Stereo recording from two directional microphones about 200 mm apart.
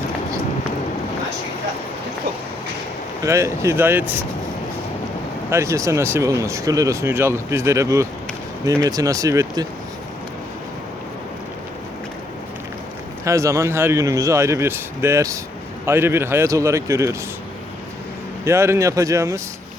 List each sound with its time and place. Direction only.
3.2 s speech: 15° right (ahead or behind)
5.5 s speech: 15° right (ahead or behind)
13.2 s speech: 15° right (ahead or behind)
18.4 s speech: 15° right (ahead or behind)